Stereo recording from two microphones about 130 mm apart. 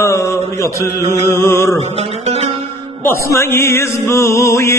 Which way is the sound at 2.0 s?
55° right (ahead or behind).